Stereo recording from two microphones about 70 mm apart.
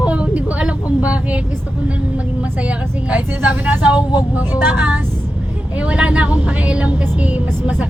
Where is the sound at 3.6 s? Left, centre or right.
Centre.